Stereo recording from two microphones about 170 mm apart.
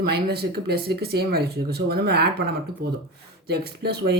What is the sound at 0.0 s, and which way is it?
Speech, 70° right (ahead or behind).